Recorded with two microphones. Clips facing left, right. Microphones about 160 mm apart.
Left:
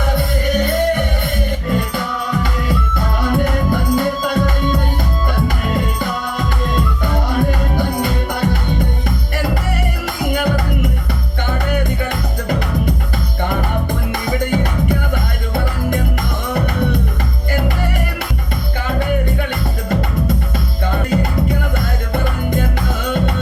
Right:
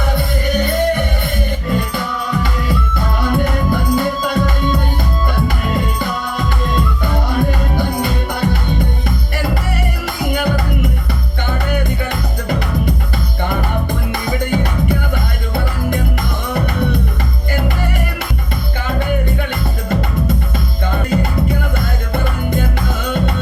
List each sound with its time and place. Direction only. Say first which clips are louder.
0.0 s music: even; 45° left (ahead or behind)
10.2 s music: even; 45° left (ahead or behind)
20.9 s music: even; 40° left (ahead or behind)